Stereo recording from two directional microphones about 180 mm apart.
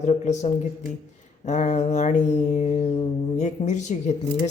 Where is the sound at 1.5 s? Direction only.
40° left (ahead or behind).